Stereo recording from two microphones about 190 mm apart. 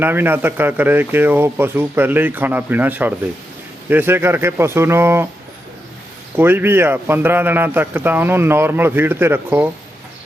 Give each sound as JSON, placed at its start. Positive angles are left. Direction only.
{"t": 0.0, "sound": "speech", "side_deg": -10}
{"t": 6.3, "sound": "speech", "side_deg": -10}